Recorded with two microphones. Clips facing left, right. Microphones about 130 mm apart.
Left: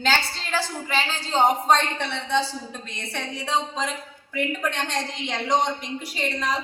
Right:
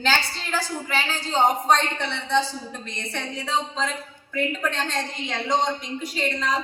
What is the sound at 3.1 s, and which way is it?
A woman's voice, 10° left (ahead or behind).